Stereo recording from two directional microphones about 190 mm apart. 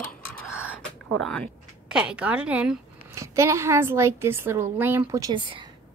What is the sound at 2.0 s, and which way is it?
A woman's voice, 5° right (ahead or behind).